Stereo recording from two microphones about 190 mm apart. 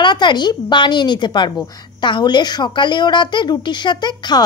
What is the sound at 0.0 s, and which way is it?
A woman's voice, 25° left (ahead or behind).